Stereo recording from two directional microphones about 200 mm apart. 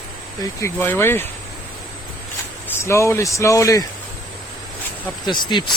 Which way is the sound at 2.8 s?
15° left (ahead or behind).